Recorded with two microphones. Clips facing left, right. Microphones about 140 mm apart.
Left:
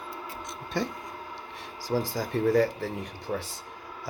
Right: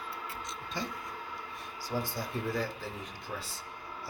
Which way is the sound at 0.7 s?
60° left (ahead or behind).